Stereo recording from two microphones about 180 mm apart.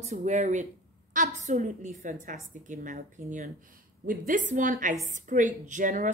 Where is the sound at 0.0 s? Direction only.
40° right (ahead or behind).